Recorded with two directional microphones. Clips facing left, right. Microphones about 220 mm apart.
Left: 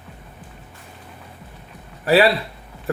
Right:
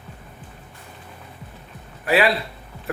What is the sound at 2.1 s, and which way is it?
Speech, 35° left (ahead or behind).